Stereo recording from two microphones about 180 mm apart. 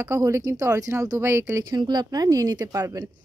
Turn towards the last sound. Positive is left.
turn(degrees=-20)  # may be behind; listen again after turning